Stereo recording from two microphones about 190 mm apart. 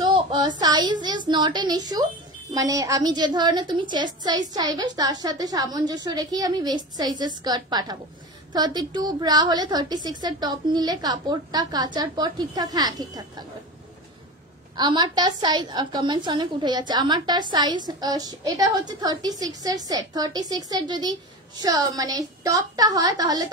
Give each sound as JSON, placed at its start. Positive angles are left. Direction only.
{"t": 0.0, "sound": "a sound", "side_deg": -20}
{"t": 0.6, "sound": "a woman's voice", "side_deg": -20}
{"t": 14.8, "sound": "a woman's voice", "side_deg": -25}